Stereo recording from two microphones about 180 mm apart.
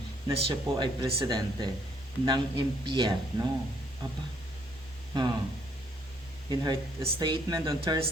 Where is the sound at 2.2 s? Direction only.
25° right (ahead or behind).